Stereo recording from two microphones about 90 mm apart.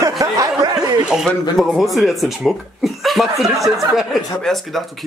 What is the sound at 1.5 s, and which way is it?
Speech, centre (ahead or behind).